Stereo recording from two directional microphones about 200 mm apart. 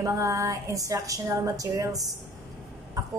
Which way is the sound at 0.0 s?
15° right (ahead or behind).